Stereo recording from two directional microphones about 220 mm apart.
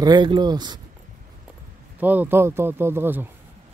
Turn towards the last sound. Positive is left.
turn(degrees=-10)  # may be behind; listen again after turning